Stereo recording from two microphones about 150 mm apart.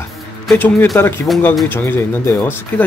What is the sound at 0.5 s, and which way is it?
Speech, 15° left (ahead or behind).